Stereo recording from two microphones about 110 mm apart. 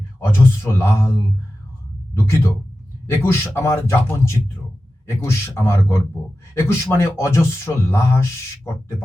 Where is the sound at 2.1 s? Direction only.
25° left (ahead or behind).